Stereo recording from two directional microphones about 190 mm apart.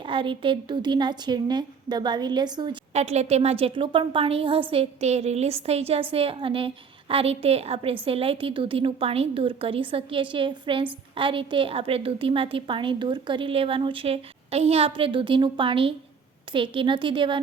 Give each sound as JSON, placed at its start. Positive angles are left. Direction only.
{"t": 0.0, "sound": "a woman's voice", "side_deg": -25}
{"t": 3.0, "sound": "a woman's voice", "side_deg": -35}